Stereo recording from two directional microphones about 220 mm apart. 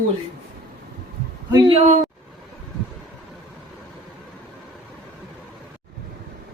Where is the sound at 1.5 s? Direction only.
25° right (ahead or behind).